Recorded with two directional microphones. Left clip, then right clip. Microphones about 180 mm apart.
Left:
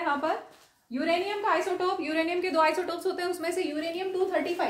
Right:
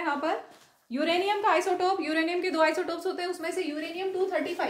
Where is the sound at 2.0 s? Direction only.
25° right (ahead or behind); by 3.7 s 15° left (ahead or behind).